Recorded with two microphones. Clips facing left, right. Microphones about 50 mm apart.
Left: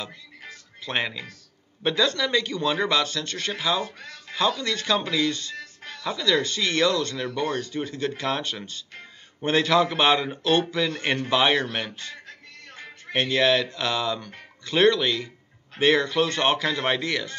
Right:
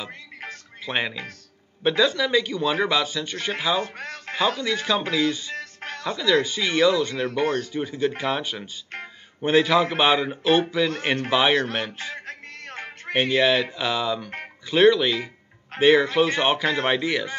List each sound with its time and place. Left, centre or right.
0.8 s speech: centre
3.8 s speech: right
4.6 s speech: centre
5.6 s music: right
6.1 s speech: centre
12.3 s music: right
13.1 s speech: centre